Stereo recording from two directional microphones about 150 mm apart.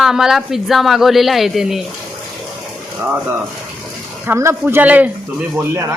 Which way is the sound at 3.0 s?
15° right (ahead or behind).